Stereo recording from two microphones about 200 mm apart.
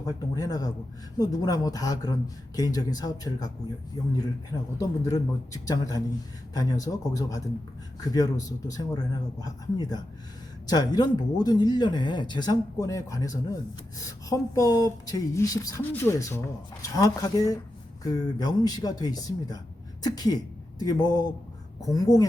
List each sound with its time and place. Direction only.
0.0 s speech: 20° left (ahead or behind)